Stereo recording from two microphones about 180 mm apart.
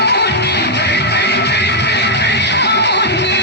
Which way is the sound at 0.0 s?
70° left (ahead or behind).